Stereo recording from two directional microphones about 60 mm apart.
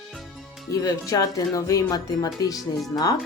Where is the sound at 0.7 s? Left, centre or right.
Left.